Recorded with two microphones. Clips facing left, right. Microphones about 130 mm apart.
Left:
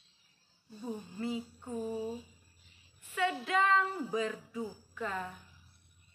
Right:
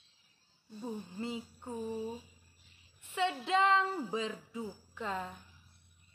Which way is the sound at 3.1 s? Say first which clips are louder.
Even; 25° right (ahead or behind).